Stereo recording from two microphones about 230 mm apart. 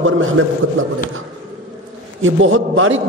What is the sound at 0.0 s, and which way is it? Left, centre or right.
Speech, right.